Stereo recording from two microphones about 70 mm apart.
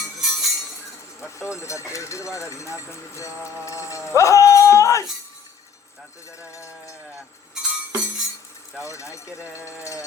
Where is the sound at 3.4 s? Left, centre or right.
Left.